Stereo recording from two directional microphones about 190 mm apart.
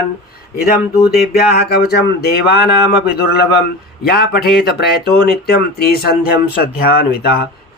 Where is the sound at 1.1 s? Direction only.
60° left (ahead or behind).